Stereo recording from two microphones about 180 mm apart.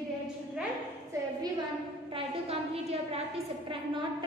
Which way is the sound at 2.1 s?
35° right (ahead or behind).